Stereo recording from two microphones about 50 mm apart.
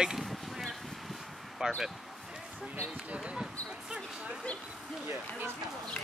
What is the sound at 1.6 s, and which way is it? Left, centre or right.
Speech, centre.